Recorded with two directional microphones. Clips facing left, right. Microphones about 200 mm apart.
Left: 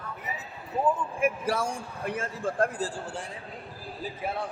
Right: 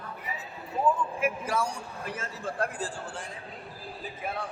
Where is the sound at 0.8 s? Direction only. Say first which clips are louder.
Even; 30° left (ahead or behind).